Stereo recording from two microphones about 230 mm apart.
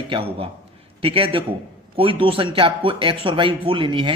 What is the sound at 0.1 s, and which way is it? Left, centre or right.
Speech, right.